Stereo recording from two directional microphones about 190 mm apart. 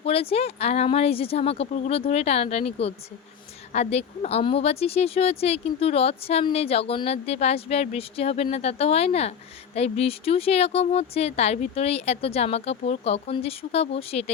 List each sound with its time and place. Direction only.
0.0 s speech: 30° left (ahead or behind)